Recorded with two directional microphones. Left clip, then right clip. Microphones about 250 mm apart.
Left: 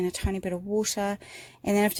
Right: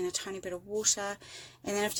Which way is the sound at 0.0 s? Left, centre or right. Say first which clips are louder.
Left 5 dB; left.